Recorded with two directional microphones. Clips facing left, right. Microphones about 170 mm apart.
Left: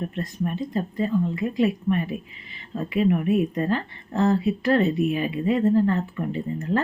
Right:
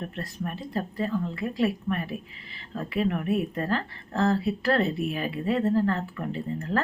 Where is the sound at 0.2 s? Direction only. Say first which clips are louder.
Left 8 dB; 20° left (ahead or behind).